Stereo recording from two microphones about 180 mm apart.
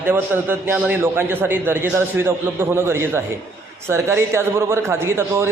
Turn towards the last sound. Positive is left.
turn(degrees=-15)  # may be behind; listen again after turning